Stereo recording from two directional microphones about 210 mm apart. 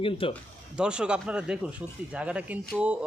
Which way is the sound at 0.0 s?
25° left (ahead or behind).